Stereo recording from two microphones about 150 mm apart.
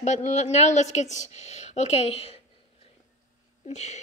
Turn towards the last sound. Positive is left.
turn(degrees=50)  # may be behind; listen again after turning